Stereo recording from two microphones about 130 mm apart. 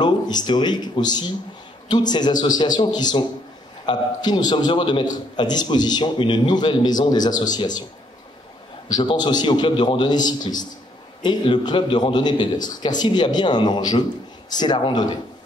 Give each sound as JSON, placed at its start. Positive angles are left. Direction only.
{"t": 0.0, "sound": "a man's voice", "side_deg": 35}
{"t": 8.8, "sound": "a man's voice", "side_deg": 30}